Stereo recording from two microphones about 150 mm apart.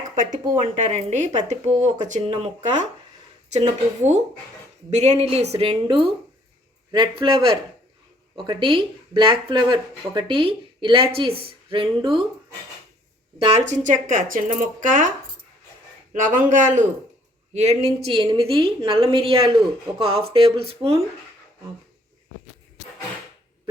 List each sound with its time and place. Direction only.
0.6 s speech: 45° right (ahead or behind)
2.2 s speech: 40° right (ahead or behind)
13.7 s speech: 55° right (ahead or behind)
16.1 s speech: 60° right (ahead or behind)
17.5 s speech: 45° right (ahead or behind)